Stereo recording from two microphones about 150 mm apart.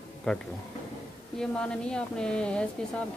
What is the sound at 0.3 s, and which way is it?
A woman's voice, 5° left (ahead or behind).